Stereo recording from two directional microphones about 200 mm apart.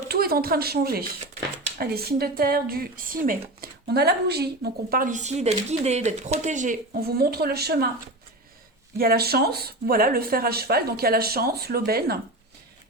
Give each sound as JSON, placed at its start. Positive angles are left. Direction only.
{"t": 0.1, "sound": "speech", "side_deg": -50}
{"t": 9.0, "sound": "speech", "side_deg": -50}